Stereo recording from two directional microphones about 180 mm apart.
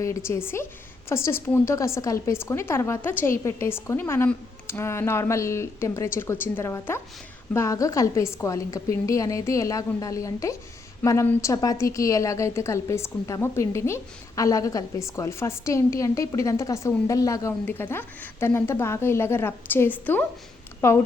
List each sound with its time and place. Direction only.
0.0 s a woman's voice: 15° left (ahead or behind)